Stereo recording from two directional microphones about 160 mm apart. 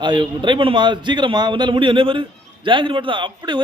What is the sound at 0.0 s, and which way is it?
A man's voice, 30° right (ahead or behind).